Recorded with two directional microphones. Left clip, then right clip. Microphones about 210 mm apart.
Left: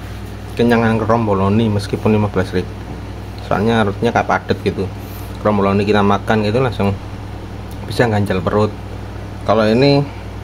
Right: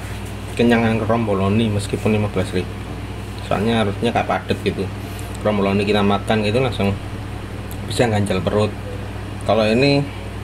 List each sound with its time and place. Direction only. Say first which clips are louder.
0.6 s speech: left 3 dB; 15° left (ahead or behind)
8.0 s speech: left 3 dB; 15° left (ahead or behind)